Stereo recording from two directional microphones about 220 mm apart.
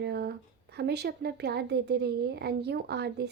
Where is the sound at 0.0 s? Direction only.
45° right (ahead or behind).